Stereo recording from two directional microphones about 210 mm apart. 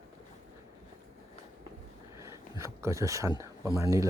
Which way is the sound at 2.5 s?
15° right (ahead or behind).